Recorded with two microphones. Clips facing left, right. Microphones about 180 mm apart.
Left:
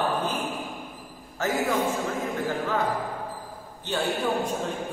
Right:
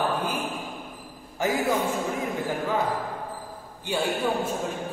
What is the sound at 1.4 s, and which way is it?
Speech, 15° right (ahead or behind).